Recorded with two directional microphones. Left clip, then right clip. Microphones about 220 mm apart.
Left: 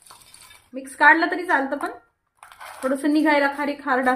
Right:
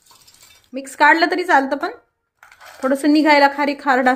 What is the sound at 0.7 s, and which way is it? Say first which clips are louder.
A woman's voice: right 2 dB; 40° right (ahead or behind).